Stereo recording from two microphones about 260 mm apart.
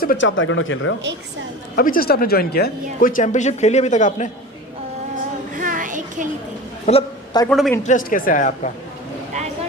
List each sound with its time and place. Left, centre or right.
0.0 s speech: left
1.7 s speech: left
5.5 s a sound: right
6.8 s a sound: left
7.4 s a woman's voice: centre
7.9 s speech: left